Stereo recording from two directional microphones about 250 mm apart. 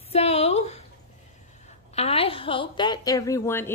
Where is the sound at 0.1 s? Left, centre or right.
Left.